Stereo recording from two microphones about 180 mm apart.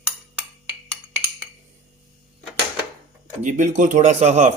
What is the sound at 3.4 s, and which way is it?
Speech, 45° right (ahead or behind).